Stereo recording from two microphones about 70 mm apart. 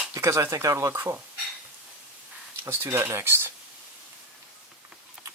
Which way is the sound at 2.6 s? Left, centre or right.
Right.